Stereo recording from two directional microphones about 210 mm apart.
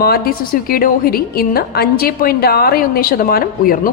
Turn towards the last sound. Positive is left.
turn(degrees=45)  # may be behind; listen again after turning